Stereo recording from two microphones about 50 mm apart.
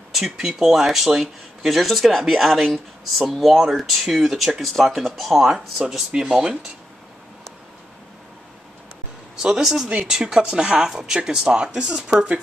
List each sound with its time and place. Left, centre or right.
0.1 s speech: centre
9.4 s speech: centre
9.8 s speech: right
10.1 s speech: centre